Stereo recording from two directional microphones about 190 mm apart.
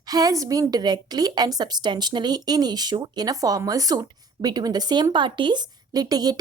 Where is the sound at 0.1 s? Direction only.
20° right (ahead or behind).